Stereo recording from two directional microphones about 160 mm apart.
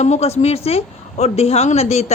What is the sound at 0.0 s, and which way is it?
A woman's voice, 45° left (ahead or behind).